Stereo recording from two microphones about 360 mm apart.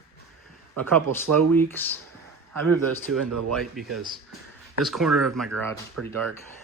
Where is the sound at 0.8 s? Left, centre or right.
Centre.